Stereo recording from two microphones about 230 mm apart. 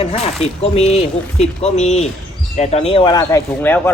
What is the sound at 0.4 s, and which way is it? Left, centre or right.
Speech, left.